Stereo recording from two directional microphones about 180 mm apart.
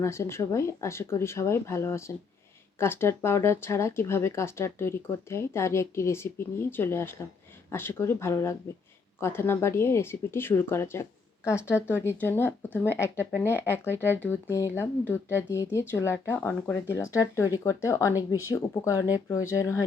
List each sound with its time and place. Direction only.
0.0 s speech: 15° left (ahead or behind)